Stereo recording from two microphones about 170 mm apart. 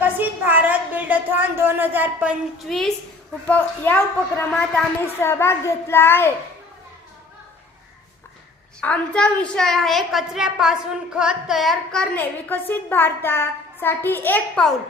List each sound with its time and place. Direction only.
0.0 s a sound: 10° right (ahead or behind)
2.6 s a woman's voice: centre (ahead or behind)
8.8 s a woman's voice: 5° left (ahead or behind)